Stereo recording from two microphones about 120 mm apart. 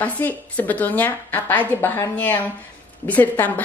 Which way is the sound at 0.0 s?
15° left (ahead or behind).